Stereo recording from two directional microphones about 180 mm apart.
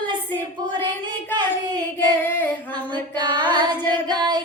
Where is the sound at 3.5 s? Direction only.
25° right (ahead or behind).